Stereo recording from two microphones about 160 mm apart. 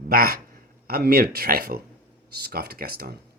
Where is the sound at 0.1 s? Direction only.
70° right (ahead or behind).